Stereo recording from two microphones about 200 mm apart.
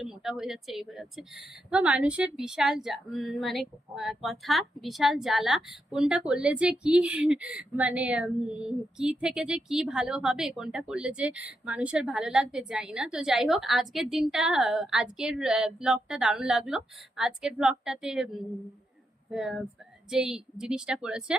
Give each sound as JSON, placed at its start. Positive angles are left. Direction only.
{"t": 0.0, "sound": "a woman's voice", "side_deg": 0}
{"t": 19.3, "sound": "a woman's voice", "side_deg": 0}